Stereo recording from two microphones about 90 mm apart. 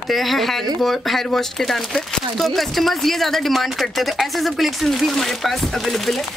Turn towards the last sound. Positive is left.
turn(degrees=0)  # may be behind; listen again after turning